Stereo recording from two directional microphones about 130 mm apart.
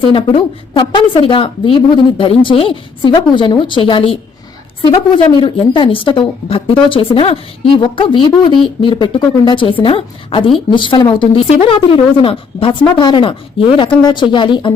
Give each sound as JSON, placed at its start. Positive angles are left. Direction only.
{"t": 0.1, "sound": "a woman's voice", "side_deg": 40}